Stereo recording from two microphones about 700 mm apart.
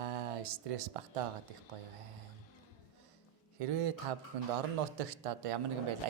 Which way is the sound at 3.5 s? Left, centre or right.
Right.